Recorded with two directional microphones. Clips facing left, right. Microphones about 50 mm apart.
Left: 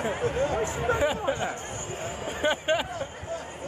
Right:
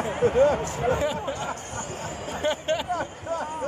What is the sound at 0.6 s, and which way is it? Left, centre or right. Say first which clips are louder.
Speech: even; centre.